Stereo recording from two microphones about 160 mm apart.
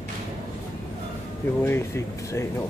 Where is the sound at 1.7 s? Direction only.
15° left (ahead or behind).